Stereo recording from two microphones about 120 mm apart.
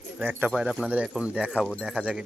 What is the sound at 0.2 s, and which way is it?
Speech, 15° right (ahead or behind).